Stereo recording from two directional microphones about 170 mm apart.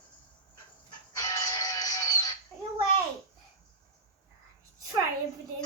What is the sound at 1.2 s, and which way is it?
Music, 20° left (ahead or behind).